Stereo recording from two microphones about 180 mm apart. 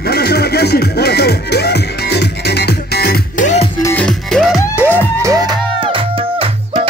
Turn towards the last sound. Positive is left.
turn(degrees=-30)  # may be behind; listen again after turning